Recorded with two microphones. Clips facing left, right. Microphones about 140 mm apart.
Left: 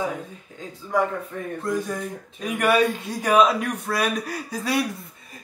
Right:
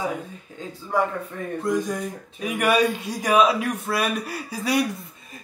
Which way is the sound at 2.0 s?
5° right (ahead or behind).